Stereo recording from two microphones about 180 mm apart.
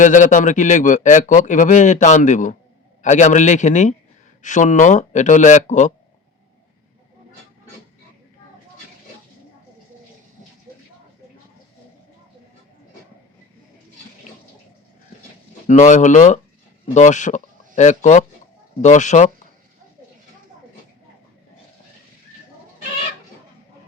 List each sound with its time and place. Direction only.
0.0 s a man's voice: 45° left (ahead or behind)
15.6 s a man's voice: 45° left (ahead or behind)